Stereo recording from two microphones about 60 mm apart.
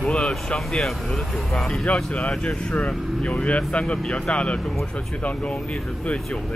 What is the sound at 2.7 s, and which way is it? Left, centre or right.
Speech, left.